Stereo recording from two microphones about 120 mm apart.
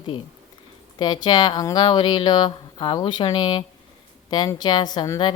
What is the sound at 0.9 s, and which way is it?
Speech, 35° left (ahead or behind).